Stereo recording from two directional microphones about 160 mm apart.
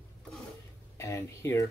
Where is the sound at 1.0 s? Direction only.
20° left (ahead or behind).